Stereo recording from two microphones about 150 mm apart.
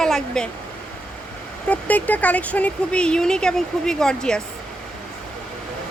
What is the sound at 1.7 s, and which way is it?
Speech, 10° left (ahead or behind).